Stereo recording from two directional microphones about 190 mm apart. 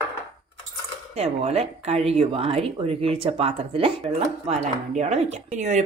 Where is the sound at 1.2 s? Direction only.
35° right (ahead or behind).